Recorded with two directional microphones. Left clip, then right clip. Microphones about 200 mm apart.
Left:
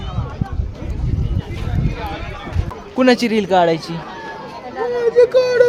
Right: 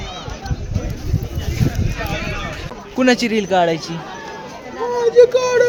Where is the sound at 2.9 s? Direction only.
15° left (ahead or behind).